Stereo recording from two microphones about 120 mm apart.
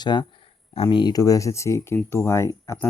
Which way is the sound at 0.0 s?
40° left (ahead or behind).